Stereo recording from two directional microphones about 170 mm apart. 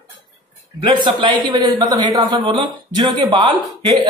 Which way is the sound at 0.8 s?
30° right (ahead or behind).